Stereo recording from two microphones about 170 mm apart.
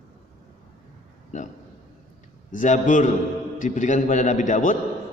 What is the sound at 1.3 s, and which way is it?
A man's voice, 45° left (ahead or behind).